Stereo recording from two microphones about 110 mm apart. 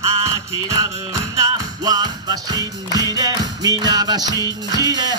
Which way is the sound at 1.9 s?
35° right (ahead or behind).